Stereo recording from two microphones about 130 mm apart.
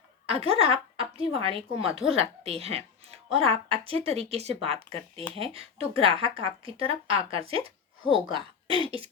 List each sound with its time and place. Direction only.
0.3 s a woman's voice: 50° right (ahead or behind)